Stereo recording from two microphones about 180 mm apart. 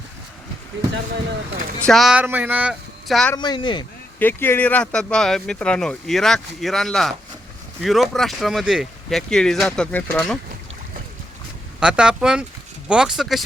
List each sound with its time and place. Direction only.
1.8 s speech: centre (ahead or behind)
3.3 s speech: 25° left (ahead or behind)
4.2 s speech: 10° left (ahead or behind)
11.8 s speech: 5° right (ahead or behind)